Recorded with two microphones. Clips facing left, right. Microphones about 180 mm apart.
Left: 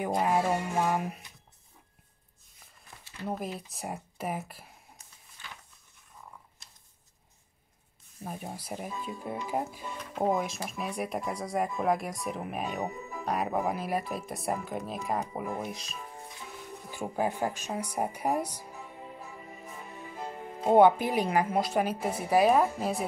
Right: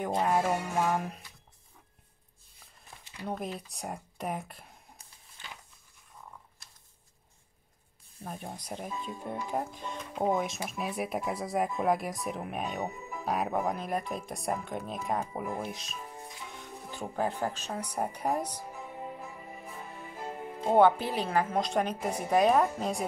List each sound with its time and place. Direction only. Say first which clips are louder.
0.0 s speech: left 1 dB; 5° left (ahead or behind)
3.0 s a sound: left 2 dB; 15° right (ahead or behind)
3.3 s speech: left 1 dB; 5° left (ahead or behind)
8.2 s speech: left 2 dB; 5° left (ahead or behind)
16.5 s speech: left 3 dB; 10° left (ahead or behind)
20.6 s a woman's voice: left 2 dB; 15° left (ahead or behind)